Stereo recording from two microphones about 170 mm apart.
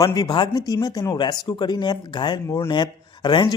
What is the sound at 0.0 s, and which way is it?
Speech, 20° left (ahead or behind).